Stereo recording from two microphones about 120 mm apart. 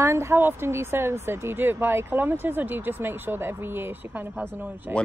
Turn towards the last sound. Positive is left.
turn(degrees=-20)  # may be behind; listen again after turning